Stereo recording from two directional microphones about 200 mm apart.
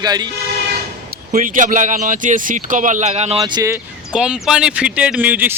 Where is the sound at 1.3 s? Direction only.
40° right (ahead or behind).